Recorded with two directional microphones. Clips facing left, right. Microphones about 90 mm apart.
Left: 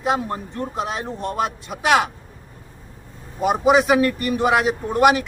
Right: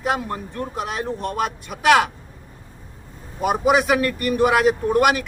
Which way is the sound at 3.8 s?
20° left (ahead or behind).